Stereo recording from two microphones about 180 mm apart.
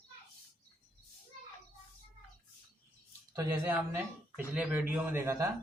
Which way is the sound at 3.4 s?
10° right (ahead or behind).